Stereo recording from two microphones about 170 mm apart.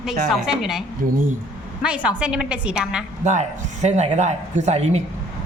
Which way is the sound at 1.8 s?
5° right (ahead or behind).